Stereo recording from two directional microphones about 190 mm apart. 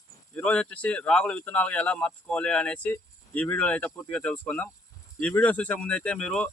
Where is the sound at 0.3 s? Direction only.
5° left (ahead or behind).